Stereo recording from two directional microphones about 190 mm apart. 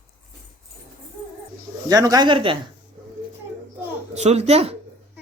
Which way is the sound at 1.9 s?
20° right (ahead or behind).